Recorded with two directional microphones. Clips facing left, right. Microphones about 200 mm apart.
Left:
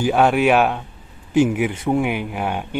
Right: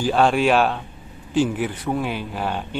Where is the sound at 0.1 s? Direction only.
10° left (ahead or behind).